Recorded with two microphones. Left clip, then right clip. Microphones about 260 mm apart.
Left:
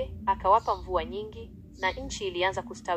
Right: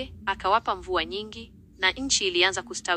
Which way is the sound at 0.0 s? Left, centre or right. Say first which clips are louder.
Left 1 dB; right.